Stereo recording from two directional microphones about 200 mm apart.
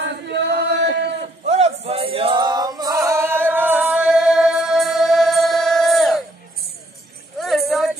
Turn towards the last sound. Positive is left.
turn(degrees=0)  # may be behind; listen again after turning